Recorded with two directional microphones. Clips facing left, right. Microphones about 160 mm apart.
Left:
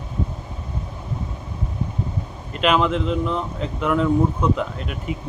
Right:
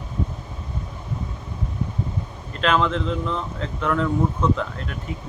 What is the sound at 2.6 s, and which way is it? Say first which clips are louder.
Speech: left 2 dB; 10° left (ahead or behind).